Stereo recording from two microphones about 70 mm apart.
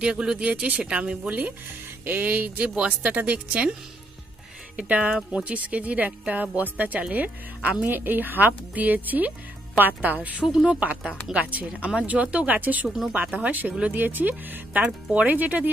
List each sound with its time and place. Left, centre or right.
0.0 s speech: centre
2.0 s speech: right
4.7 s speech: centre
10.4 s speech: centre
11.3 s speech: right
12.8 s speech: centre
13.4 s speech: right